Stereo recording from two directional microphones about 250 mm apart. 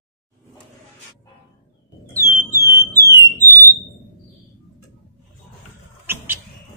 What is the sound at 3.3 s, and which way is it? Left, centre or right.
Alarm, centre.